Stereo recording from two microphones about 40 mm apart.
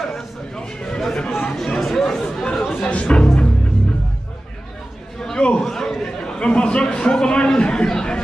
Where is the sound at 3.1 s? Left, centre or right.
Left.